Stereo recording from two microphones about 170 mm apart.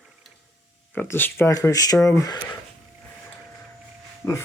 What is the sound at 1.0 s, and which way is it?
Speech, 10° left (ahead or behind).